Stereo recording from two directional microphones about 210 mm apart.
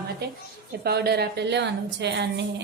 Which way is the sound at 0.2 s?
50° right (ahead or behind).